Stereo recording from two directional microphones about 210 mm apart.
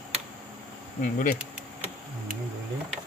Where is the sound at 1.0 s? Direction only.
40° left (ahead or behind).